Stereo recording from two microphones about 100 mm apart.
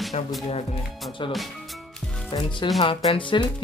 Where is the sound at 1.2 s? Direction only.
55° left (ahead or behind).